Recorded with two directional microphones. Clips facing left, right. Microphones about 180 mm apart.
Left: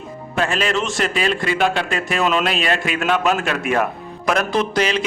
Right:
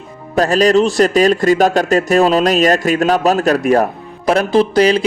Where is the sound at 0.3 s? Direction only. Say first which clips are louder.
Right 9 dB; 40° right (ahead or behind).